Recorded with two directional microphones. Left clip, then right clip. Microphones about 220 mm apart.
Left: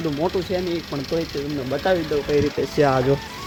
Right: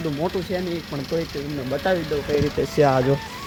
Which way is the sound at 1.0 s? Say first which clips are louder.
Even; 50° left (ahead or behind).